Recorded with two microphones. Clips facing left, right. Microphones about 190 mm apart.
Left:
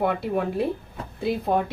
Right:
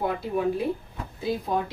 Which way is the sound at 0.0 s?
65° left (ahead or behind).